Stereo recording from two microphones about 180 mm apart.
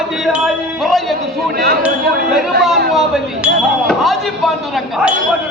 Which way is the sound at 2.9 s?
Centre (ahead or behind).